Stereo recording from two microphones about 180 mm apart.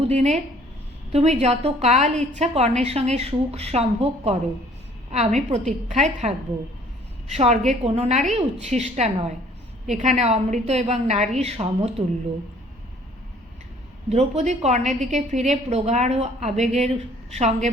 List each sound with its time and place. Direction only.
0.0 s a woman's voice: 40° right (ahead or behind)
7.3 s a woman's voice: 35° right (ahead or behind)
14.1 s a woman's voice: 40° right (ahead or behind)